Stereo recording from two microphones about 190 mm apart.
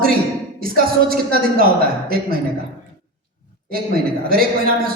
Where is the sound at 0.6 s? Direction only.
50° right (ahead or behind).